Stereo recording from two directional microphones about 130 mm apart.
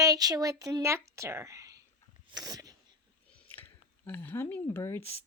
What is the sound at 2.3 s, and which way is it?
Sneeze, 30° right (ahead or behind).